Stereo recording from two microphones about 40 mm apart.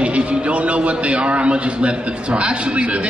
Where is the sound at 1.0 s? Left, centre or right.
Right.